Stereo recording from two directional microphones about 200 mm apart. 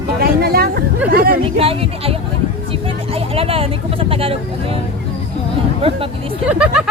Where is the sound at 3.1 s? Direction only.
30° right (ahead or behind).